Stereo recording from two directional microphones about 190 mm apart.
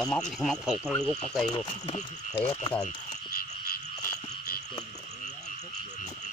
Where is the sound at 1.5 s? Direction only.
25° left (ahead or behind).